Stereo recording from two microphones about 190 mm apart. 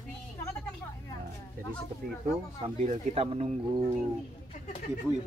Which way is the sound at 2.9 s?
30° right (ahead or behind).